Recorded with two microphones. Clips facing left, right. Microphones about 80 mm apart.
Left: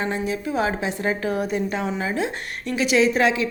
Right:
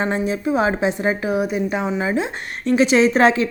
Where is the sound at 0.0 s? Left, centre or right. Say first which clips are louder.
Right 4 dB; right.